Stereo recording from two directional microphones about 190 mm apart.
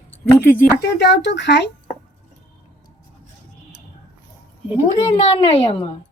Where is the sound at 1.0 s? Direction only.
65° left (ahead or behind).